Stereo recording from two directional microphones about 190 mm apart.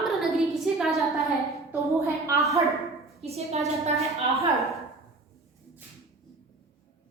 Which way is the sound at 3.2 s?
35° right (ahead or behind).